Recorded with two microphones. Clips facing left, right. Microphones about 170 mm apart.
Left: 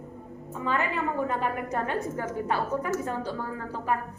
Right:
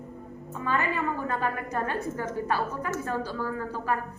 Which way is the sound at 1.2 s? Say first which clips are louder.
Left 1 dB; 20° left (ahead or behind).